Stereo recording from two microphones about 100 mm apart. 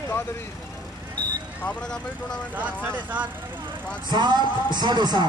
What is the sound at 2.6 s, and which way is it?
Speech, 15° right (ahead or behind).